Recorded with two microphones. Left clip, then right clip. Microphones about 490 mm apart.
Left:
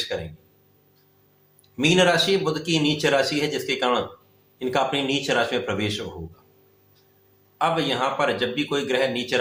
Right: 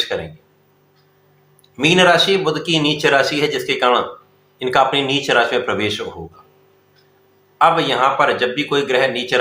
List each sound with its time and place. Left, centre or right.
0.1 s speech: left
1.7 s speech: left
7.6 s speech: left